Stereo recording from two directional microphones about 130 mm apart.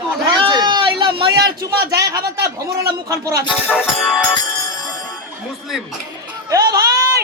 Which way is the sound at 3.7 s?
10° left (ahead or behind).